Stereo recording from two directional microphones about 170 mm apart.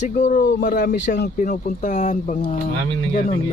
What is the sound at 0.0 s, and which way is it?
Speech, 50° left (ahead or behind).